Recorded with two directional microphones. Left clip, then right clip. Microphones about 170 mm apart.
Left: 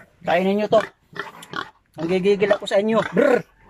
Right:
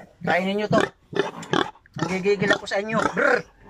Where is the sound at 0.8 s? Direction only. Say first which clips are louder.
Right 7 dB; 75° right (ahead or behind).